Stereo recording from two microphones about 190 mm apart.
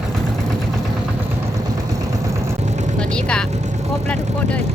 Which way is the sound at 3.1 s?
5° left (ahead or behind).